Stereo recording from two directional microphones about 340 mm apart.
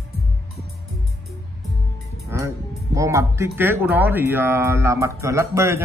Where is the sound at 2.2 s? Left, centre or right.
Centre.